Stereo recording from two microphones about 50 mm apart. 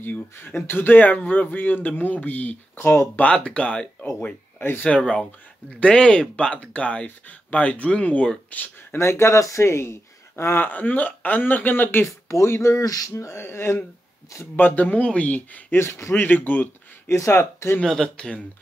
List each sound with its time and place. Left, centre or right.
0.0 s speech: left
3.2 s speech: left
4.6 s speech: left
4.8 s speech: left
8.9 s speech: left
10.6 s speech: left
12.3 s speech: left
13.2 s speech: left
14.6 s speech: left
15.7 s speech: left
16.1 s speech: left
17.1 s speech: left
17.8 s speech: centre
18.1 s speech: centre